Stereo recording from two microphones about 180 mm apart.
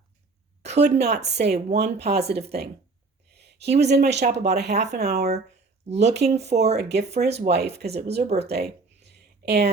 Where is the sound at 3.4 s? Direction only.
70° right (ahead or behind).